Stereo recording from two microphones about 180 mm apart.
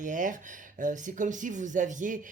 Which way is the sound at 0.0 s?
45° right (ahead or behind).